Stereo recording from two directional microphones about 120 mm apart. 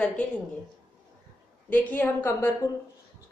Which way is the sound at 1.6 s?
15° left (ahead or behind).